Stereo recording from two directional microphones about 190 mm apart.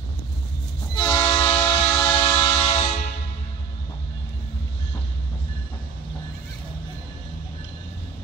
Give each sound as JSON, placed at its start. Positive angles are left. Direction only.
{"t": 0.9, "sound": "train", "side_deg": 20}